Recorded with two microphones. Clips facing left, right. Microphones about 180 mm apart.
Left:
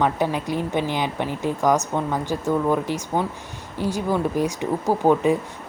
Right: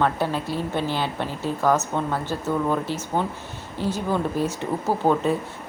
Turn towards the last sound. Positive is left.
turn(degrees=15)  # may be behind; listen again after turning